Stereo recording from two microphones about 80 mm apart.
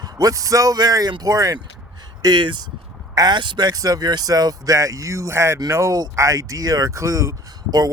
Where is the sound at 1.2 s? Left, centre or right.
Right.